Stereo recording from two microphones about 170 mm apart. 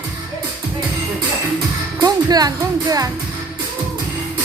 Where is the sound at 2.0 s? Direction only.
20° right (ahead or behind).